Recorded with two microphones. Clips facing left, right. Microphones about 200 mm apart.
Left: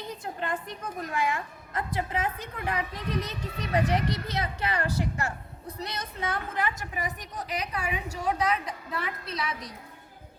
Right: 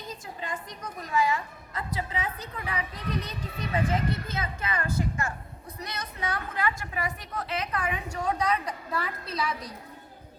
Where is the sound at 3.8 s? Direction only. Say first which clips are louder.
Left 1 dB; 75° left (ahead or behind).